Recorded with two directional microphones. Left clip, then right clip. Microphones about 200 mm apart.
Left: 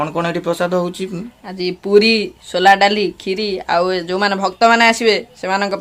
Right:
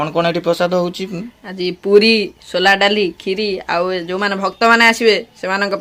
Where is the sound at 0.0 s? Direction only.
5° right (ahead or behind).